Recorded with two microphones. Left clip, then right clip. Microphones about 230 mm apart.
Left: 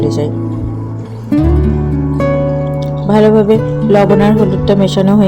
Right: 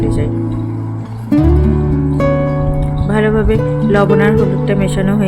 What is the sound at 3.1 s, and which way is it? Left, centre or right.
Speech, centre.